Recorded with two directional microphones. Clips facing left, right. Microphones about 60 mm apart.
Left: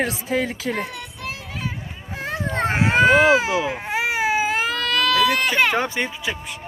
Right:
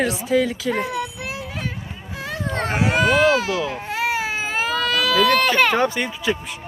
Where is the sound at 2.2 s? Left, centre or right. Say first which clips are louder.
Left 2 dB; left; by 5.9 s centre.